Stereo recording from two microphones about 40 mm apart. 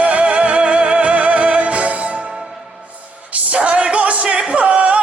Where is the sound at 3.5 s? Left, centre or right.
Right.